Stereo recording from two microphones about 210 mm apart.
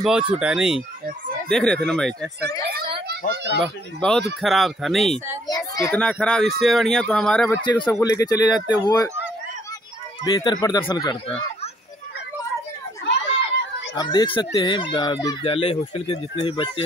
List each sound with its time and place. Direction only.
0.0 s speech: 5° right (ahead or behind)
3.1 s a child's voice: 55° right (ahead or behind)
3.6 s speech: centre (ahead or behind)
5.5 s speech: 15° left (ahead or behind)
7.6 s speech: 20° left (ahead or behind)
10.2 s speech: 20° left (ahead or behind)
13.9 s speech: 20° left (ahead or behind)